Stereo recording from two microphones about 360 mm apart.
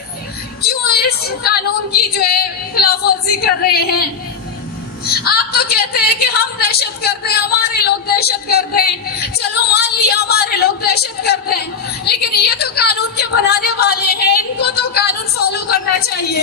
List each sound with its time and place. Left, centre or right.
0.6 s a woman's voice: left
5.0 s a woman's voice: left